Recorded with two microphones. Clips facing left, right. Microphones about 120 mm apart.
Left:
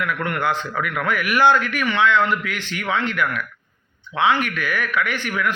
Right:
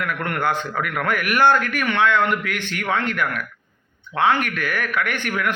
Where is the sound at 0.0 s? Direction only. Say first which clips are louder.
Even; 50° right (ahead or behind).